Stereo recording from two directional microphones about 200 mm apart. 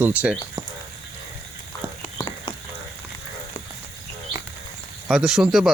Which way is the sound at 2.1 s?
25° left (ahead or behind).